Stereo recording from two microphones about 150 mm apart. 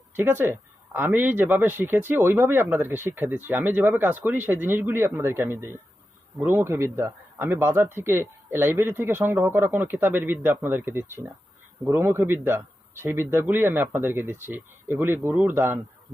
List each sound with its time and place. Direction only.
0.2 s speech: 15° right (ahead or behind)